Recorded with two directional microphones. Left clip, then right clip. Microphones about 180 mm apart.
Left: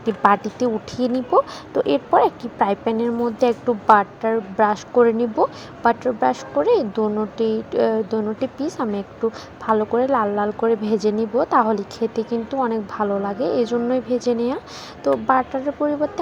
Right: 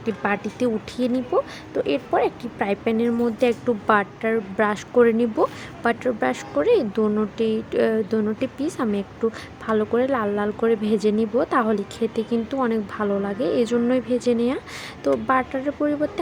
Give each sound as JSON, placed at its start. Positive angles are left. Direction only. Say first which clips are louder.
{"t": 0.0, "sound": "speech", "louder": "left 7 dB", "side_deg": 5}
{"t": 11.7, "sound": "a woman's voice", "louder": "left 2 dB", "side_deg": -30}
{"t": 12.3, "sound": "speech", "louder": "left 1 dB", "side_deg": -10}